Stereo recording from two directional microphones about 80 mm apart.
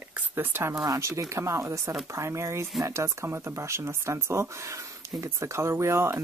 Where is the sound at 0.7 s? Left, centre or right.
Right.